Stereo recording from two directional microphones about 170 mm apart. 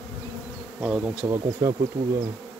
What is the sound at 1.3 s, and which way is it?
Bee, 15° right (ahead or behind).